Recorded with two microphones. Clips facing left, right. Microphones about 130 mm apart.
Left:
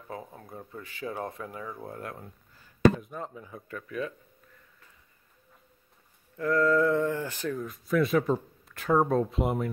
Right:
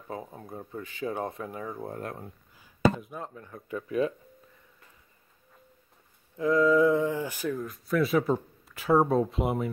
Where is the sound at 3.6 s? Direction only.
25° right (ahead or behind).